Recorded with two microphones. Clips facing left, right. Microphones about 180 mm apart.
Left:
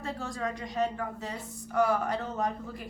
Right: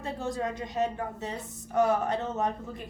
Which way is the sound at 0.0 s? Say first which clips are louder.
Right 2 dB; 20° right (ahead or behind).